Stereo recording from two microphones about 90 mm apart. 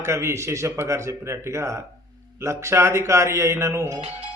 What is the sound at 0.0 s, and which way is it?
A man's voice, 30° right (ahead or behind).